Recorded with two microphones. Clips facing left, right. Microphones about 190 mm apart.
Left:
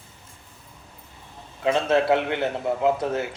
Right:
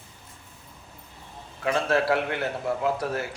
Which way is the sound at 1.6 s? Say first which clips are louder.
Left 3 dB; 20° left (ahead or behind).